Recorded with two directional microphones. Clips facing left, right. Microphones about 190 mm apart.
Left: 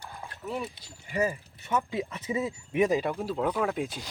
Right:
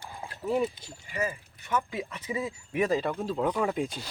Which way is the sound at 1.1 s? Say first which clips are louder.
Left 4 dB; 35° left (ahead or behind).